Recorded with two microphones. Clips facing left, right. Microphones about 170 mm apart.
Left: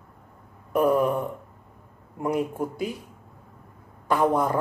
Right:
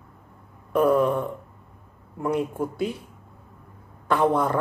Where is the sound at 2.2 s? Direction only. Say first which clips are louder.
Right 1 dB; 10° left (ahead or behind).